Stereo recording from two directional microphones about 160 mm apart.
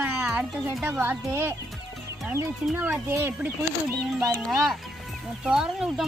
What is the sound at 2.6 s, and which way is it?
Speech, 10° right (ahead or behind).